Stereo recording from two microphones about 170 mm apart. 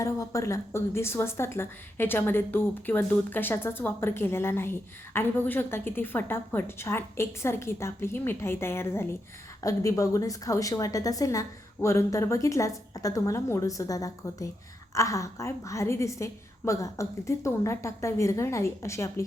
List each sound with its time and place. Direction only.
0.0 s a woman's voice: 20° left (ahead or behind)